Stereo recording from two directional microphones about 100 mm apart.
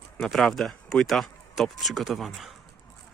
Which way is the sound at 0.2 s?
Centre (ahead or behind).